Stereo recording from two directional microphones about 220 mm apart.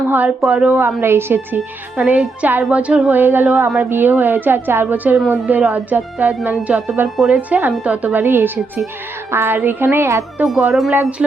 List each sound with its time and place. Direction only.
0.1 s a woman's voice: 5° right (ahead or behind)